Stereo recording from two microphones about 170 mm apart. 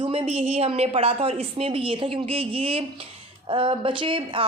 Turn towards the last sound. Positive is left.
turn(degrees=-30)  # may be behind; listen again after turning